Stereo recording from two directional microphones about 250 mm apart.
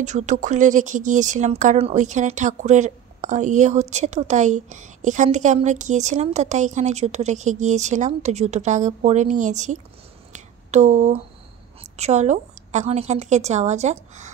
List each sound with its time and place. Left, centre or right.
0.0 s speech: right
10.3 s a sound: right
12.0 s speech: right